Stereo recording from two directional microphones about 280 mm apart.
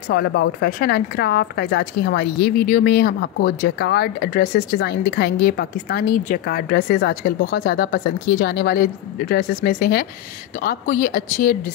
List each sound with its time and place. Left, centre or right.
0.1 s speech: left